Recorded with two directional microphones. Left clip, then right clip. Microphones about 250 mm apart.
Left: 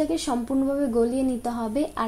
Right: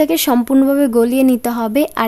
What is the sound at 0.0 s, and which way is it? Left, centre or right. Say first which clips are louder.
Speech: right 11 dB; right.